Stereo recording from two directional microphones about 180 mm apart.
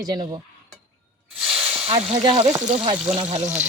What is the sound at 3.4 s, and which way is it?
Speech, 10° right (ahead or behind).